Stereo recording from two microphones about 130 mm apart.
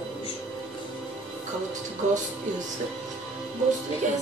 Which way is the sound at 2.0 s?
65° right (ahead or behind).